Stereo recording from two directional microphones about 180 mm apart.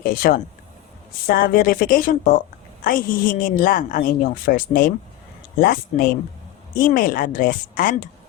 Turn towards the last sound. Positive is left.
turn(degrees=50)  # may be behind; listen again after turning